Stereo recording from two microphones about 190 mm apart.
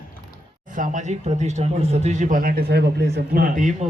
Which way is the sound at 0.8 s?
40° right (ahead or behind).